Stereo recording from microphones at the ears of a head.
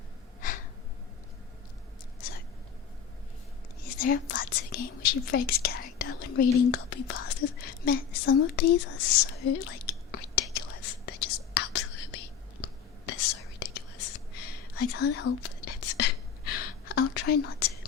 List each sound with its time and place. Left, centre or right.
3.8 s whispering: left